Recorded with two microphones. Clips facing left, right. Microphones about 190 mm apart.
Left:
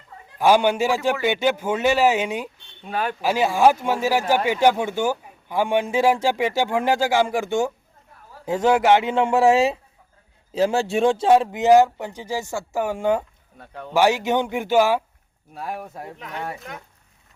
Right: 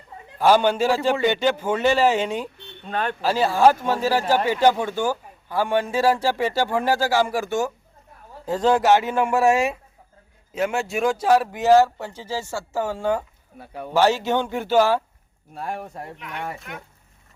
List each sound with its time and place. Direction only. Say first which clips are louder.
0.3 s a man's voice: even; 10° left (ahead or behind)
13.6 s speech: right 3 dB; 10° right (ahead or behind)
13.9 s a man's voice: left 1 dB; 15° left (ahead or behind)
16.1 s speech: left 1 dB; 40° left (ahead or behind)
16.4 s speech: left 1 dB; centre (ahead or behind)